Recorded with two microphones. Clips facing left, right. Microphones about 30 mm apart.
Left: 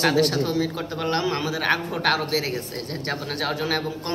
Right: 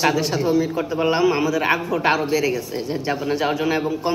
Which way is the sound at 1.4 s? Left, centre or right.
Left.